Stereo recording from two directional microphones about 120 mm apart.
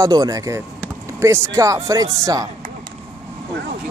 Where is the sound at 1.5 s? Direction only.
25° right (ahead or behind).